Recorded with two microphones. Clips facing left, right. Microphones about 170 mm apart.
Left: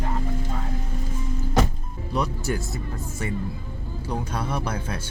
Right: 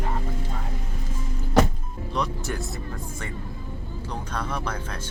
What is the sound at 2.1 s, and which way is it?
Speech, 5° left (ahead or behind).